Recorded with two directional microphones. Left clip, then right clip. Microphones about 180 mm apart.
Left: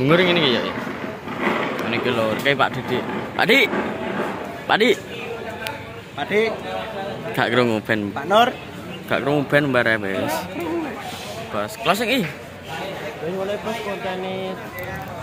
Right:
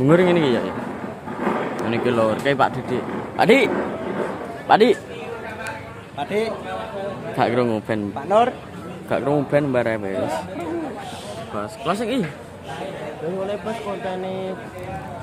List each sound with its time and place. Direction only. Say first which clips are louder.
0.0 s speech: even; 30° right (ahead or behind)
2.9 s a man's voice: left 1 dB; 5° right (ahead or behind)
6.1 s a man's voice: left 3 dB; 20° right (ahead or behind)
7.3 s a man's voice: left 1 dB; 5° right (ahead or behind)
8.3 s a man's voice: left 1 dB; centre (ahead or behind)
9.1 s a man's voice: left 1 dB; 15° right (ahead or behind)
11.5 s a man's voice: left 4 dB; 5° right (ahead or behind)